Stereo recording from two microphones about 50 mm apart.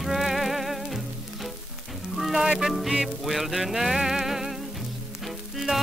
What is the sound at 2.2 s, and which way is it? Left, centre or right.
Music, centre.